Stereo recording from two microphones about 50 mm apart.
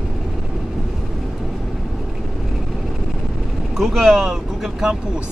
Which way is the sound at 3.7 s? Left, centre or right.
Centre.